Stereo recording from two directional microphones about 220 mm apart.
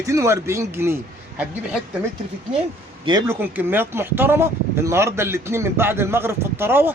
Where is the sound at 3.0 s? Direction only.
15° right (ahead or behind).